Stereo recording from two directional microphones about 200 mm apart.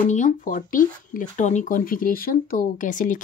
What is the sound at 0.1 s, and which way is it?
A woman's voice, 40° left (ahead or behind).